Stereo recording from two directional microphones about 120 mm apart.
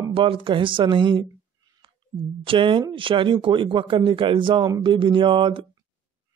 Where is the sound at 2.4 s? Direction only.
45° right (ahead or behind).